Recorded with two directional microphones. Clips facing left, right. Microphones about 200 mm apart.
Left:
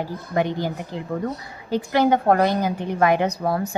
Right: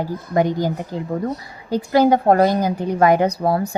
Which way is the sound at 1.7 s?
40° right (ahead or behind).